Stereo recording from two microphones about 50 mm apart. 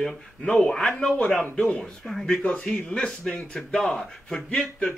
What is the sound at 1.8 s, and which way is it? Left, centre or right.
Speech, centre.